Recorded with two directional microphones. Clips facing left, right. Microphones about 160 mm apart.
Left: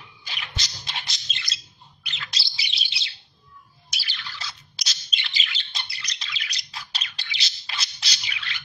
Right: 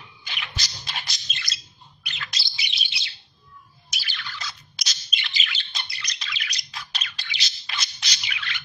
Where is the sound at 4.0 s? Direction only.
30° left (ahead or behind).